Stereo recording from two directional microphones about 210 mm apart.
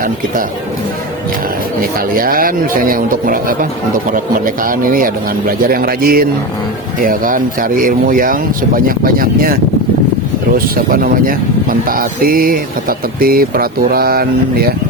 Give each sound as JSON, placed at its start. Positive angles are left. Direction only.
{"t": 1.8, "sound": "speech", "side_deg": -45}
{"t": 10.9, "sound": "speech", "side_deg": -45}